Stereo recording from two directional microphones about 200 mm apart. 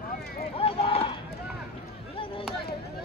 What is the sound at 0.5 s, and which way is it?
Run, 30° left (ahead or behind).